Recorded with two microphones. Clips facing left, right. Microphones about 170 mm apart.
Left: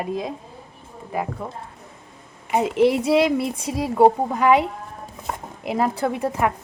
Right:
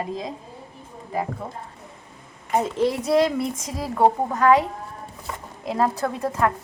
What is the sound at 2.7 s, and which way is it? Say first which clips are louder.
Speech: left 8 dB; 70° left (ahead or behind).